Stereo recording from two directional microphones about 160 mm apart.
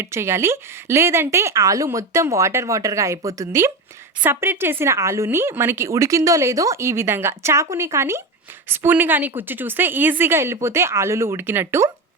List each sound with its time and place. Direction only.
0.0 s a woman's voice: 15° right (ahead or behind)